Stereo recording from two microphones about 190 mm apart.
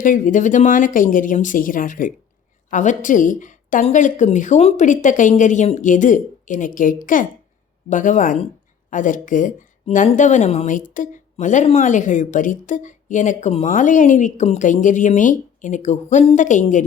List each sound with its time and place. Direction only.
0.0 s speech: 45° left (ahead or behind)